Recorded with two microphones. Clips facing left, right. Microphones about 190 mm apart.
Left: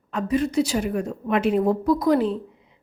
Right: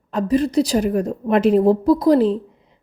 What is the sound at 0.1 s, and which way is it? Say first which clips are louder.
Speech: right 5 dB; 35° right (ahead or behind).